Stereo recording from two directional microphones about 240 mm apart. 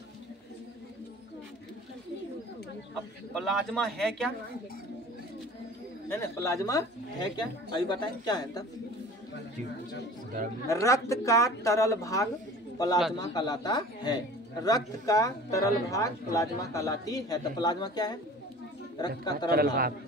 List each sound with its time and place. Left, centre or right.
2.9 s speech: centre
6.0 s a man's voice: centre
10.7 s a man's voice: centre
19.5 s a man's voice: right